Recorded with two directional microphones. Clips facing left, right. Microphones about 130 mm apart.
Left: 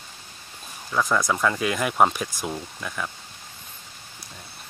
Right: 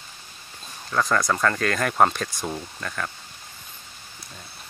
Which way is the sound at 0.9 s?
5° left (ahead or behind).